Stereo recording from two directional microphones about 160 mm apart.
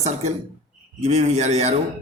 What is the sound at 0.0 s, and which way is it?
Speech, 45° right (ahead or behind).